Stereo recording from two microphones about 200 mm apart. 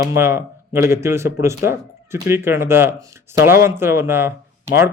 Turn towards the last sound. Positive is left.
turn(degrees=-10)  # may be behind; listen again after turning